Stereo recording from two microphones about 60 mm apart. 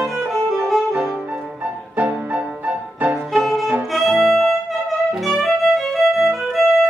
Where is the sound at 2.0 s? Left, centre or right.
Right.